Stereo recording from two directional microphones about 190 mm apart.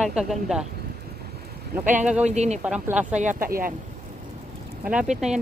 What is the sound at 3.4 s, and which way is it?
Speech, 50° right (ahead or behind).